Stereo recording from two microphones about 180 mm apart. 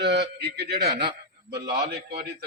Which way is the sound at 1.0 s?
65° right (ahead or behind).